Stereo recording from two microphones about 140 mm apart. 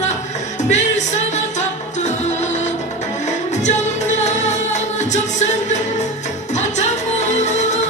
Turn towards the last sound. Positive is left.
turn(degrees=55)  # may be behind; listen again after turning